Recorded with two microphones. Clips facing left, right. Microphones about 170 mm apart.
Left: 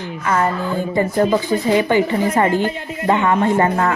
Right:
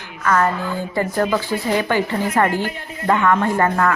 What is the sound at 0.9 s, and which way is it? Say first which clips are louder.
A woman's voice: left 3 dB; 25° left (ahead or behind).